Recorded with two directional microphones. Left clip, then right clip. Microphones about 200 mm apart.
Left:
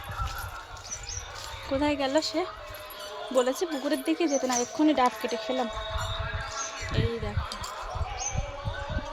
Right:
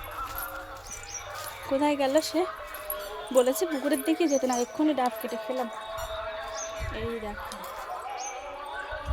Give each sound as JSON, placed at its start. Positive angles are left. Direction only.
{"t": 1.7, "sound": "a woman's voice", "side_deg": -5}
{"t": 4.9, "sound": "speech", "side_deg": 40}